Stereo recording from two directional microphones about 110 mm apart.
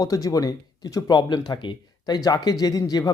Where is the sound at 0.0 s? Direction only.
35° left (ahead or behind).